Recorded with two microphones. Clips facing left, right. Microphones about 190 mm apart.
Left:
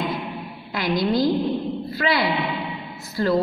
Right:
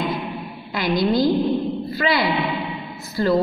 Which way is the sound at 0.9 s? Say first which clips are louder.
Right 2 dB; 30° right (ahead or behind).